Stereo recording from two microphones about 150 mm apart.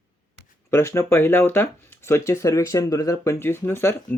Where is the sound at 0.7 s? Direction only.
15° left (ahead or behind).